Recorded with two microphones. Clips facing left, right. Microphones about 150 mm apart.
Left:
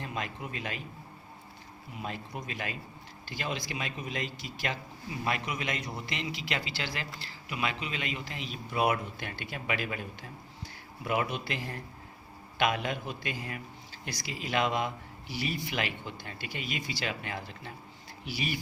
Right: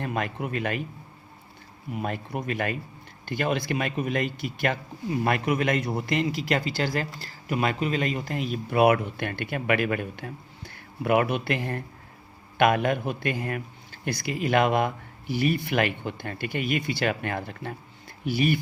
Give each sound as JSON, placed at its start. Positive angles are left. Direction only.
{"t": 0.0, "sound": "a man's voice", "side_deg": -60}
{"t": 2.0, "sound": "a man's voice", "side_deg": -55}